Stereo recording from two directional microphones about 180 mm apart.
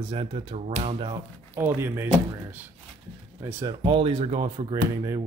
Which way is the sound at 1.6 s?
15° right (ahead or behind).